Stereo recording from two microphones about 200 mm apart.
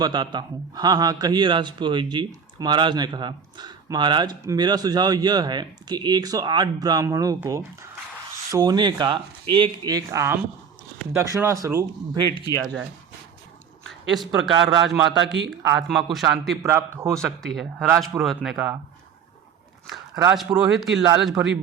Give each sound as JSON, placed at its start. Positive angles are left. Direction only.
{"t": 0.0, "sound": "speech", "side_deg": -20}
{"t": 14.1, "sound": "a man's voice", "side_deg": 0}
{"t": 16.6, "sound": "speech", "side_deg": -10}
{"t": 17.2, "sound": "a man's voice", "side_deg": 0}
{"t": 19.9, "sound": "a man's voice", "side_deg": -5}